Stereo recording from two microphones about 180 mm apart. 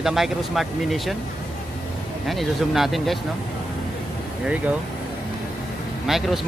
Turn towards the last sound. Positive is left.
turn(degrees=0)  # may be behind; listen again after turning